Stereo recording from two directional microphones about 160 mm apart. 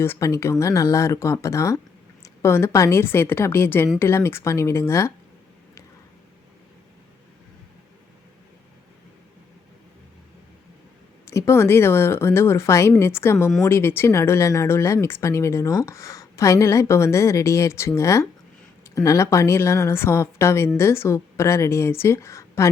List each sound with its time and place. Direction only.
0.0 s speech: 15° left (ahead or behind)
11.3 s speech: 15° left (ahead or behind)